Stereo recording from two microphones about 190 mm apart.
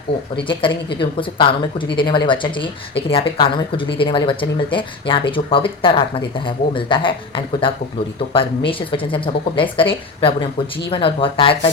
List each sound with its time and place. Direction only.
0.3 s speech: 25° left (ahead or behind)